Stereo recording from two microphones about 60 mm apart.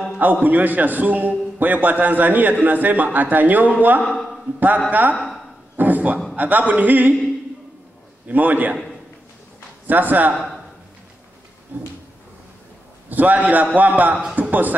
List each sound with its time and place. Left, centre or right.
0.2 s a man's voice: right
4.0 s a man's voice: centre
4.6 s a man's voice: right
5.1 s a sound: centre
5.8 s a man's voice: right
8.3 s a man's voice: right
9.8 s a man's voice: right
10.3 s speech: centre
11.7 s a man's voice: right
13.1 s a man's voice: right